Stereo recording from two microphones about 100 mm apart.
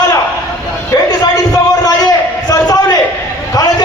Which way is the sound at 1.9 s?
40° left (ahead or behind).